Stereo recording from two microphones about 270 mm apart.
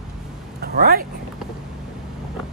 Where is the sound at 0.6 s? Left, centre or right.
Right.